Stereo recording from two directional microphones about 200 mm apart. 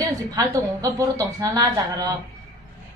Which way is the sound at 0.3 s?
15° right (ahead or behind).